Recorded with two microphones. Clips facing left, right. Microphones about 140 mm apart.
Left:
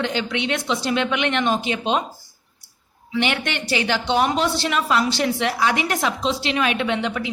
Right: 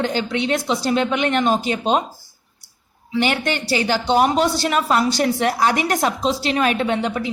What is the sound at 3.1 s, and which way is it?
Speech, 40° right (ahead or behind).